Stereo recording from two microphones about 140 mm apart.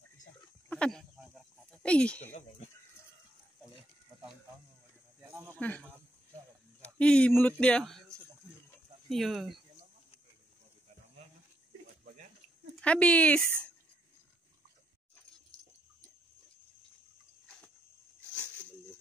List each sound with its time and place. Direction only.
0.7 s a sound: 5° left (ahead or behind)
1.7 s speech: 5° left (ahead or behind)
5.2 s snake: 15° right (ahead or behind)
5.6 s speech: 10° left (ahead or behind)
12.8 s speech: 10° left (ahead or behind)